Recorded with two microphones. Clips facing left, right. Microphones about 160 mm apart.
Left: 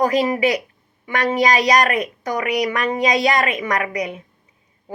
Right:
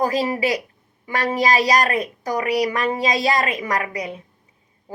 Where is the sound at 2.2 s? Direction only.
35° right (ahead or behind).